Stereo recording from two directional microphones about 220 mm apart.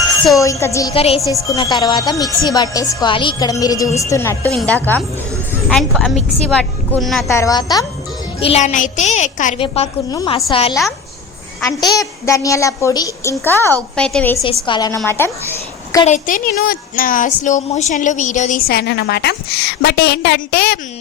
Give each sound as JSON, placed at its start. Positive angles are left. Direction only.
{"t": 0.3, "sound": "a woman's voice", "side_deg": 15}
{"t": 0.9, "sound": "a woman's voice", "side_deg": 25}
{"t": 1.3, "sound": "a woman's voice", "side_deg": 15}
{"t": 7.3, "sound": "a woman's voice", "side_deg": 15}
{"t": 8.4, "sound": "a woman's voice", "side_deg": 30}
{"t": 14.4, "sound": "a woman's voice", "side_deg": 20}
{"t": 16.0, "sound": "a woman's voice", "side_deg": 35}